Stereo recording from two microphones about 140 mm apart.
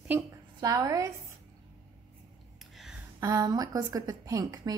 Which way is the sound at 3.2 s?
25° right (ahead or behind).